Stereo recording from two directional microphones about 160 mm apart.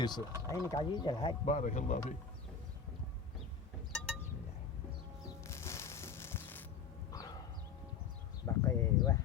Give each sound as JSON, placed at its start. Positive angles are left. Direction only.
{"t": 0.4, "sound": "speech", "side_deg": 20}
{"t": 1.5, "sound": "speech", "side_deg": 45}
{"t": 3.9, "sound": "chink", "side_deg": 5}
{"t": 5.5, "sound": "music", "side_deg": 15}
{"t": 7.1, "sound": "dog", "side_deg": 25}
{"t": 8.4, "sound": "a sound", "side_deg": 20}